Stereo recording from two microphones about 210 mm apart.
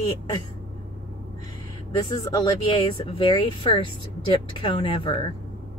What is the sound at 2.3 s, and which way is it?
Speech, 20° left (ahead or behind).